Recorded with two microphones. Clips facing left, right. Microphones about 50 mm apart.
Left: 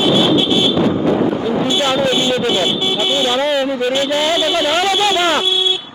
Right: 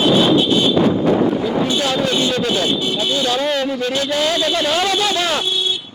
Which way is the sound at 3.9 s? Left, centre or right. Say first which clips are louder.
Left 2 dB; left.